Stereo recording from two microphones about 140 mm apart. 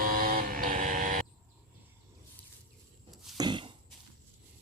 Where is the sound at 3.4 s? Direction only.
35° right (ahead or behind).